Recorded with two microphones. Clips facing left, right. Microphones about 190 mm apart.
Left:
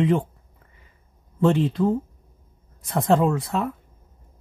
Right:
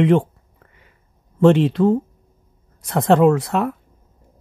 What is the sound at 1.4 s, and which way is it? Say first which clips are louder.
Speech: right 6 dB; 75° right (ahead or behind).